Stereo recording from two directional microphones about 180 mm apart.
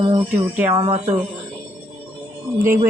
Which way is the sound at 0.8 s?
35° right (ahead or behind).